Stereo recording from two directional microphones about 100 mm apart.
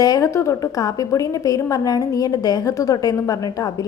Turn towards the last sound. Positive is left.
turn(degrees=35)  # may be behind; listen again after turning